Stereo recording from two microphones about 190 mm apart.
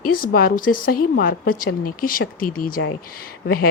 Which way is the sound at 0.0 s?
50° left (ahead or behind).